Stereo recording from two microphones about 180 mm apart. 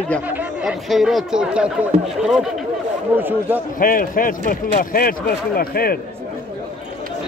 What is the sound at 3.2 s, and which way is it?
Speech, 10° right (ahead or behind).